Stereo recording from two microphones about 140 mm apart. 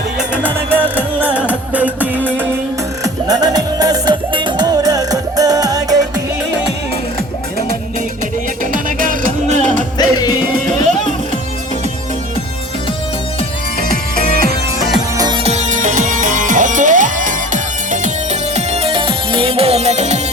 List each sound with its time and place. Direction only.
0.2 s music: 10° right (ahead or behind)
3.0 s music: 30° right (ahead or behind)
8.7 s music: 80° right; by 9.8 s 60° right (ahead or behind)
10.0 s music: 30° left (ahead or behind)
15.4 s music: 60° right (ahead or behind)